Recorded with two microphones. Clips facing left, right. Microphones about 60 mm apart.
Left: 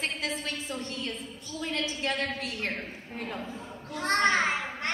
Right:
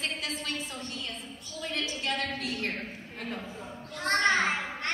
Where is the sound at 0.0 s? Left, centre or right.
Left.